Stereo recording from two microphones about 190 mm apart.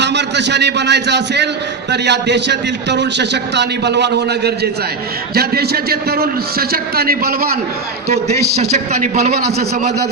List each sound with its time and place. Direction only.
0.0 s a man's voice: 65° right (ahead or behind)
9.1 s a man's voice: 55° right (ahead or behind)